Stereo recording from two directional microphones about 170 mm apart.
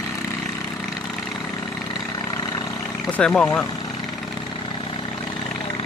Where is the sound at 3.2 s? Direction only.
5° left (ahead or behind).